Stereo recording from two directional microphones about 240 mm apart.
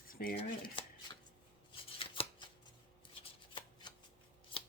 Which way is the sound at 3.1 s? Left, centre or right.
Left.